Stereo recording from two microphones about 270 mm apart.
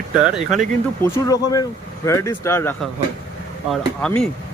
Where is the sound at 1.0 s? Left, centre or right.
Centre.